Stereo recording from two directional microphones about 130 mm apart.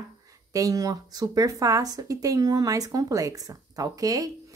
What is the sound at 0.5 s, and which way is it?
A woman's voice, 25° right (ahead or behind).